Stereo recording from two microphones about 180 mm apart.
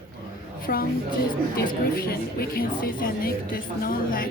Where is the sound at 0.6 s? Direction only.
55° left (ahead or behind).